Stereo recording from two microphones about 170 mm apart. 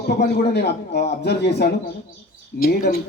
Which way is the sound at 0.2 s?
80° left.